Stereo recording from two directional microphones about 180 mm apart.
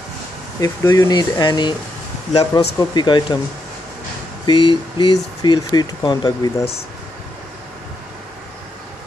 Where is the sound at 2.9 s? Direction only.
25° left (ahead or behind).